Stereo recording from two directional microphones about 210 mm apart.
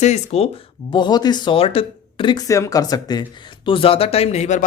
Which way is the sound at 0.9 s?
20° left (ahead or behind).